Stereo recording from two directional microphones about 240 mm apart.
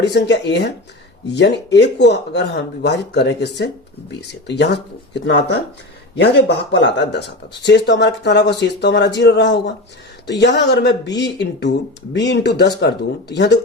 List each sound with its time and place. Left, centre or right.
0.0 s speech: left